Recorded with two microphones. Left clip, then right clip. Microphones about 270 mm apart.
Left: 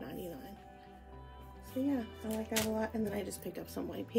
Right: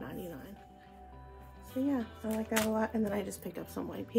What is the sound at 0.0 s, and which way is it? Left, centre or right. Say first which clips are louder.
Music: right 1 dB; centre.